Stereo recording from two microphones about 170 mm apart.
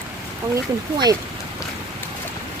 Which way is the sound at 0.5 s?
25° right (ahead or behind).